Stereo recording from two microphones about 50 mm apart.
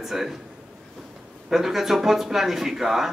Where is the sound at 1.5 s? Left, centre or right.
Centre.